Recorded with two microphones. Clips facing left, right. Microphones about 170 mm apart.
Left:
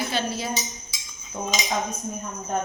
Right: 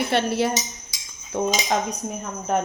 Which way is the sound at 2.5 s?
85° right.